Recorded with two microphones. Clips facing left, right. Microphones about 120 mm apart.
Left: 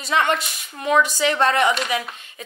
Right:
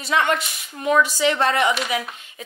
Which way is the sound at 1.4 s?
30° left (ahead or behind).